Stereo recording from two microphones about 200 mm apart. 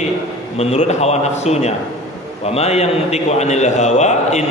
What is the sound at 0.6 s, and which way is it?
A man's voice, 30° left (ahead or behind).